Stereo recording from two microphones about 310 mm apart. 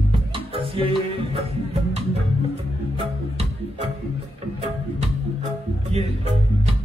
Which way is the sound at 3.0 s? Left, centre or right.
Centre.